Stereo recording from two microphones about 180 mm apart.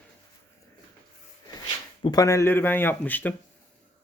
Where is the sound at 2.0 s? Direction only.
20° left (ahead or behind).